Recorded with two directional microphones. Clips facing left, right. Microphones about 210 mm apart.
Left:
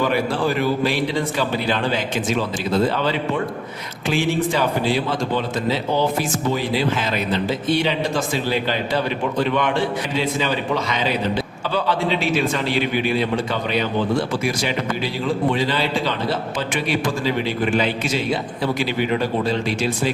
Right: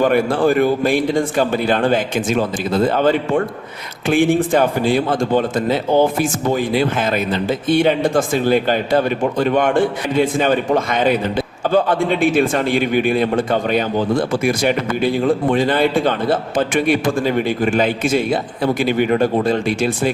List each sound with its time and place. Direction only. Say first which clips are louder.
0.0 s a man's voice: right 6 dB; 50° right (ahead or behind)